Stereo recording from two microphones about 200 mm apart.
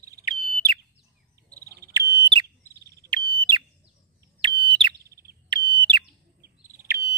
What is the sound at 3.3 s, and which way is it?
Bird, 20° right (ahead or behind).